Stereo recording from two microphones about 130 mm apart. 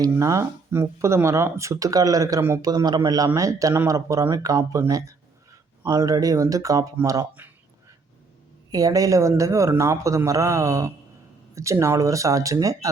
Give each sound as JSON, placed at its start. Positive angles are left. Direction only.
{"t": 0.0, "sound": "speech", "side_deg": -25}
{"t": 8.7, "sound": "speech", "side_deg": -25}